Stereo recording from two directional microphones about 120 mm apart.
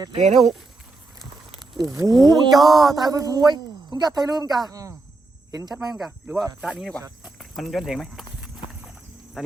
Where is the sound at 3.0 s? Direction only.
30° right (ahead or behind).